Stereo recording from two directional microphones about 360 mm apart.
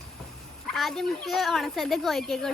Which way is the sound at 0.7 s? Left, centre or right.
Centre.